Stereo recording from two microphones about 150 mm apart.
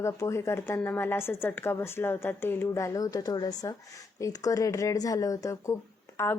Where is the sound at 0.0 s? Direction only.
20° left (ahead or behind).